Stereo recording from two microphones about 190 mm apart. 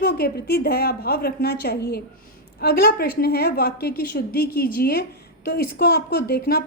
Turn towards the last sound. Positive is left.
turn(degrees=55)  # may be behind; listen again after turning